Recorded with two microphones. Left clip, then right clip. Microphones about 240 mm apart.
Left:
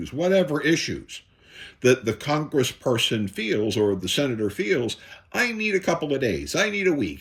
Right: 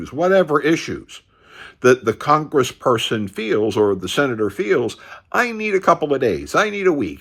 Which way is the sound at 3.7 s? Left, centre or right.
Right.